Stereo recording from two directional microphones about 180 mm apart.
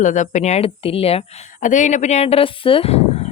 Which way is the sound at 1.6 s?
45° left (ahead or behind).